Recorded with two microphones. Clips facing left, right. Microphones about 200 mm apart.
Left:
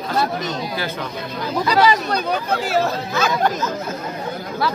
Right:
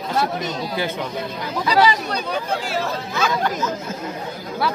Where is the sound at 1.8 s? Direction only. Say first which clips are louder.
Left 2 dB; 45° left (ahead or behind).